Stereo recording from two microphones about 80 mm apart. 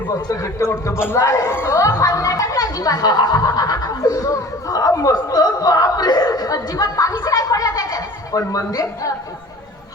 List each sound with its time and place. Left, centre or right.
0.3 s speech: left
1.7 s speech: left